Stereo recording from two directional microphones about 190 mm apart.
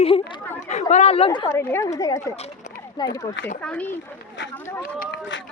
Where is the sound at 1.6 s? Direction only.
10° left (ahead or behind).